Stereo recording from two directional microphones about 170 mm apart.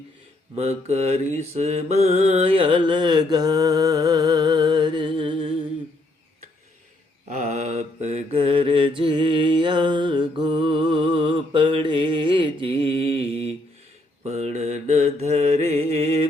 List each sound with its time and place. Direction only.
0.5 s mantra: 40° right (ahead or behind)
7.3 s mantra: 45° right (ahead or behind)